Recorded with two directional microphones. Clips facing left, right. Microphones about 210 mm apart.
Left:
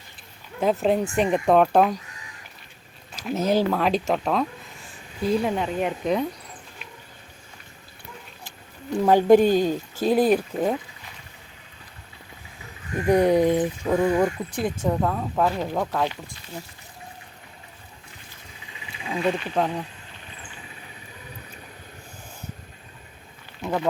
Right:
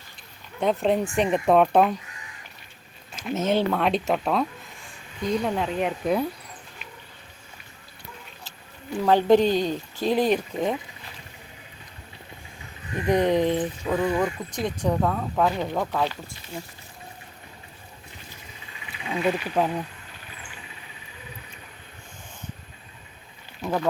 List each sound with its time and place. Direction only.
0.6 s speech: 5° left (ahead or behind)
3.2 s speech: centre (ahead or behind)
9.0 s speech: 10° left (ahead or behind)
13.1 s speech: 10° left (ahead or behind)
18.9 s wild animals: 25° left (ahead or behind)
19.2 s speech: 5° right (ahead or behind)
23.6 s speech: centre (ahead or behind)